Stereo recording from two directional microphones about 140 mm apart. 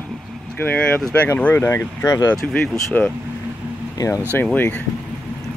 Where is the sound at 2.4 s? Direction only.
5° left (ahead or behind).